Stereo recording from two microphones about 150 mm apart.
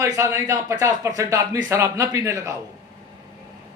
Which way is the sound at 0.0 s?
20° right (ahead or behind).